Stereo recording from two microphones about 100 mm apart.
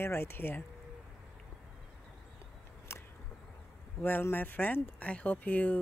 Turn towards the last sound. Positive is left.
turn(degrees=15)  # may be behind; listen again after turning